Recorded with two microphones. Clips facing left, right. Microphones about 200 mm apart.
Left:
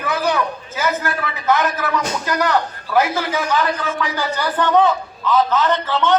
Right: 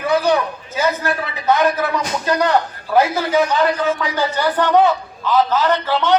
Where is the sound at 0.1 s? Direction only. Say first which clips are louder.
Right 4 dB; 30° right (ahead or behind).